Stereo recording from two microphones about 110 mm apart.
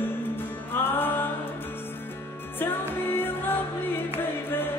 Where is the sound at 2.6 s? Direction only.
20° left (ahead or behind).